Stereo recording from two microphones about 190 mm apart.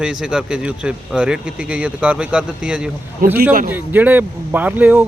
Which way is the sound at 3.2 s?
50° right (ahead or behind).